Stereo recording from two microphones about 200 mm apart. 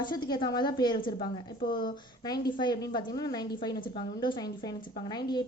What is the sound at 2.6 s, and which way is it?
A woman's voice, 20° left (ahead or behind).